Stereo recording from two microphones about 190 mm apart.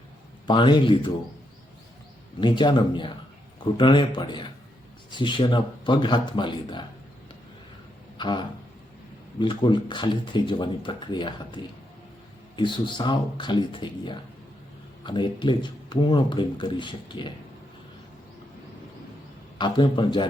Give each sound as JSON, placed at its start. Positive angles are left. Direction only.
{"t": 0.4, "sound": "speech", "side_deg": 25}
{"t": 2.4, "sound": "speech", "side_deg": 25}
{"t": 8.2, "sound": "speech", "side_deg": 25}
{"t": 19.5, "sound": "speech", "side_deg": 25}